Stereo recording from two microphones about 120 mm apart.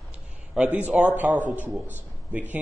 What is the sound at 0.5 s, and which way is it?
A man's voice, 10° right (ahead or behind).